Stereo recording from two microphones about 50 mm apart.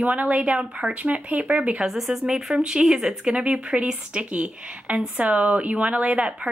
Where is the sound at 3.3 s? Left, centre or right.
Right.